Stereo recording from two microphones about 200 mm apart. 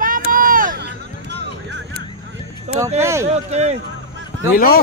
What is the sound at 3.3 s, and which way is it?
Speech, 35° right (ahead or behind).